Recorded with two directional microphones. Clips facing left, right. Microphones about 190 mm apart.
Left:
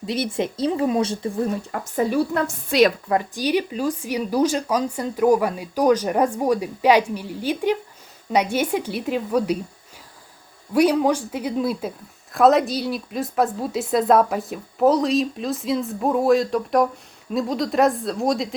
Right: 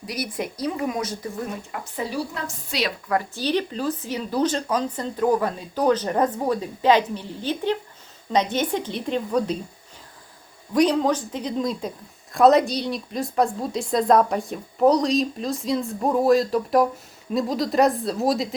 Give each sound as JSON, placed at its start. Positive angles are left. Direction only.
{"t": 0.0, "sound": "a woman's voice", "side_deg": 25}
{"t": 1.7, "sound": "a woman's voice", "side_deg": 45}
{"t": 3.1, "sound": "speech", "side_deg": 15}
{"t": 10.8, "sound": "a woman's voice", "side_deg": 10}